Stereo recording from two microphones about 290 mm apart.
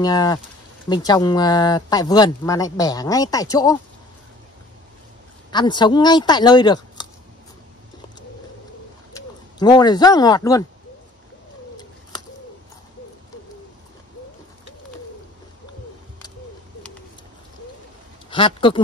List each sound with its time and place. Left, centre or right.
0.0 s speech: centre
5.5 s speech: centre
9.1 s speech: centre
18.3 s speech: centre